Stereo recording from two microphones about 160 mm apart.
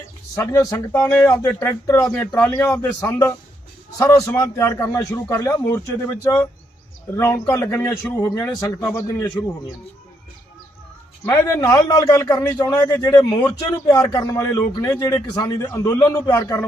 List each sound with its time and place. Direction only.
0.3 s a man's voice: 20° left (ahead or behind)
1.0 s a man's voice: 10° left (ahead or behind)
11.3 s a man's voice: 20° left (ahead or behind)